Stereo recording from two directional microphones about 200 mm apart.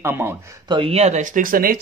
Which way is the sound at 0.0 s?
10° right (ahead or behind).